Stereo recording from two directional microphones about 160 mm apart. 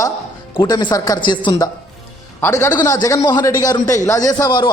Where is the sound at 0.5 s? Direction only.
30° left (ahead or behind).